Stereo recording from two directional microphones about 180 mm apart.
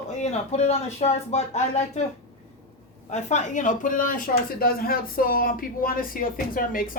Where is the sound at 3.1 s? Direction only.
40° left (ahead or behind).